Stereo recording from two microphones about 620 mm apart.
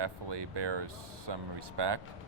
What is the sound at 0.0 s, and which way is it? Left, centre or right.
Speech, right.